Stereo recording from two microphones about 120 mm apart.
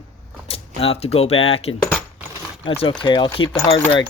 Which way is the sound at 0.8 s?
55° left (ahead or behind).